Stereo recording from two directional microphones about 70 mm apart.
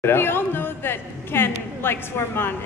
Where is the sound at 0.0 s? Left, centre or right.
Left.